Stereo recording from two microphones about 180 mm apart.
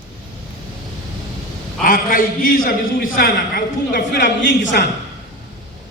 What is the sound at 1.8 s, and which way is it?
A man's voice, 50° left (ahead or behind).